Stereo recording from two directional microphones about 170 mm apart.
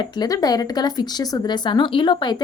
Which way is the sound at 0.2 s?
25° left (ahead or behind).